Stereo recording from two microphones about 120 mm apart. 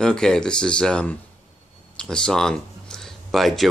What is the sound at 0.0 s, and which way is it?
Music, 5° left (ahead or behind).